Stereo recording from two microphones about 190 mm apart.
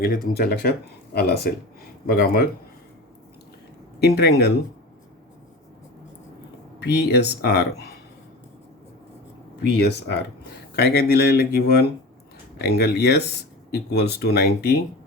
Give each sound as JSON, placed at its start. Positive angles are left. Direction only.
{"t": 0.0, "sound": "speech", "side_deg": 55}
{"t": 4.0, "sound": "speech", "side_deg": 60}
{"t": 6.8, "sound": "speech", "side_deg": 60}
{"t": 9.6, "sound": "speech", "side_deg": 60}